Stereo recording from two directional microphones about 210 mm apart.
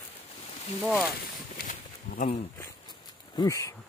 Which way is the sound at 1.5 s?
40° left (ahead or behind).